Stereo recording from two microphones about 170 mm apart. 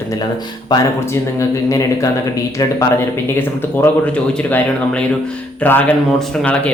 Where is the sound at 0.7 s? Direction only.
20° left (ahead or behind).